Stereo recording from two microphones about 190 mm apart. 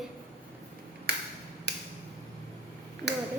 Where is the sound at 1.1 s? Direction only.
55° right (ahead or behind).